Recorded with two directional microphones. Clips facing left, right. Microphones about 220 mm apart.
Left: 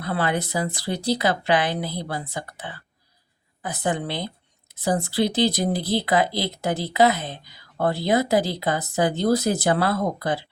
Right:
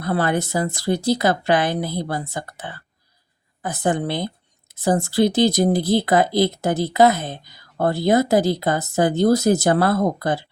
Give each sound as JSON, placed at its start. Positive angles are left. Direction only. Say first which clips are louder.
{"t": 0.0, "sound": "speech", "louder": "right 4 dB", "side_deg": -45}